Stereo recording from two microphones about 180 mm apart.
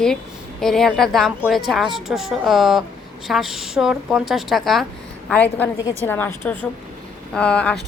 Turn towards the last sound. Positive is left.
turn(degrees=5)  # may be behind; listen again after turning